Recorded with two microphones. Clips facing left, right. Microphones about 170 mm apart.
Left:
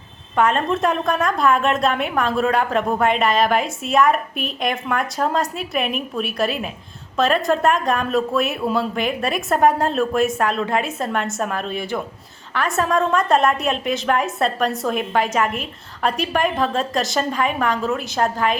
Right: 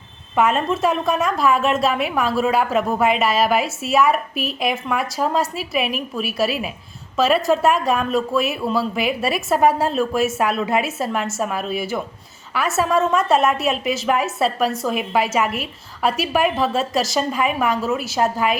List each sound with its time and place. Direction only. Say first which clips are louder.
0.3 s a woman's voice: even; 5° right (ahead or behind)